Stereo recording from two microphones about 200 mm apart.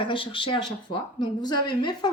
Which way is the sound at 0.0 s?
25° left (ahead or behind).